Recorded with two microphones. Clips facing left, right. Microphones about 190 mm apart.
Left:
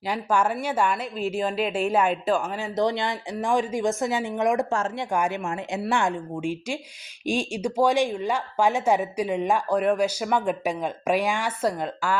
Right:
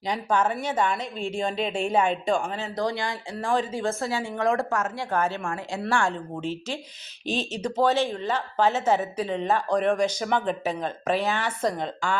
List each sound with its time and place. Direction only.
0.1 s a woman's voice: 10° left (ahead or behind)
2.7 s a woman's voice: 20° left (ahead or behind)